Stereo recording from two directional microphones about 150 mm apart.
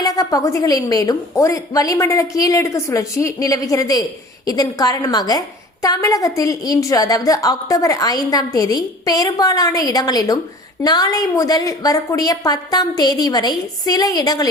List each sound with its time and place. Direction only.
0.0 s a woman's voice: 25° left (ahead or behind)